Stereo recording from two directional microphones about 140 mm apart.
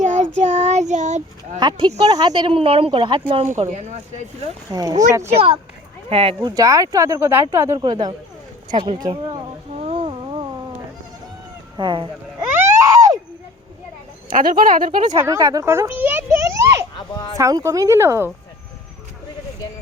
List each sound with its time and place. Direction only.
0.0 s child singing: 60° right (ahead or behind)
1.5 s speech: 30° right (ahead or behind)
3.6 s speech: 55° right (ahead or behind)
4.7 s speech: 25° right (ahead or behind)
5.3 s speech: 45° right (ahead or behind)
6.5 s speech: 25° right (ahead or behind)
9.7 s a sound: 45° right (ahead or behind)
11.8 s speech: 35° right (ahead or behind)
12.5 s a sound: 25° right (ahead or behind)
14.3 s speech: 80° right; by 15.1 s 65° right (ahead or behind)
15.2 s a sound: 25° right (ahead or behind)
17.3 s speech: 25° right (ahead or behind)